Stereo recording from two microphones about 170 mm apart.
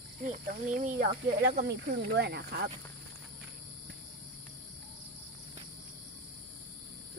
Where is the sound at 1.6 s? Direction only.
80° right.